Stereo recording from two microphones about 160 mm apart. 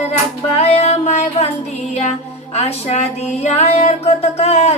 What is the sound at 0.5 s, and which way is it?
Music, 40° left (ahead or behind).